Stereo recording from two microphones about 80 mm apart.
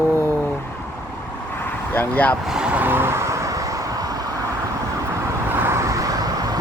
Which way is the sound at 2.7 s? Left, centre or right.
Right.